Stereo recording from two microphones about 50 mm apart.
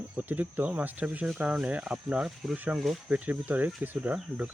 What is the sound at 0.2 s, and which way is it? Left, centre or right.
Speech, right.